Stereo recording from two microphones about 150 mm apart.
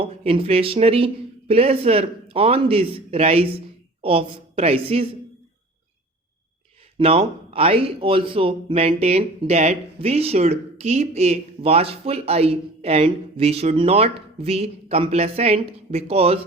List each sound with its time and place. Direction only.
0.0 s speech: 40° right (ahead or behind)
7.0 s speech: 40° right (ahead or behind)